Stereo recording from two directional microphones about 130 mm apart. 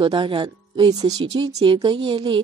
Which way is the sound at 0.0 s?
40° right (ahead or behind).